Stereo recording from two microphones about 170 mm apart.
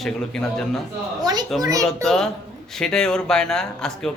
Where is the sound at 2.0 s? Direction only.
5° left (ahead or behind).